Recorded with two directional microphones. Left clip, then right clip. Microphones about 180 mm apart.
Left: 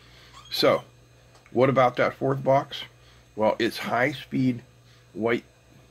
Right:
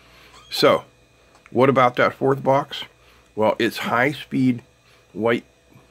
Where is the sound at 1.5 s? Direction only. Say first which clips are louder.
Right 4 dB; 40° right (ahead or behind).